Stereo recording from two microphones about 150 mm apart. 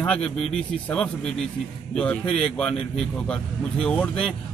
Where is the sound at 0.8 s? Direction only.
5° left (ahead or behind).